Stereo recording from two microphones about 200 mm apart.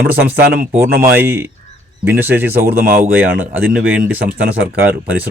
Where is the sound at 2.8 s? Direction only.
45° right (ahead or behind).